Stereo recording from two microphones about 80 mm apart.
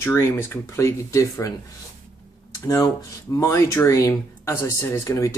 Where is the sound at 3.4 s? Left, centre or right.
Left.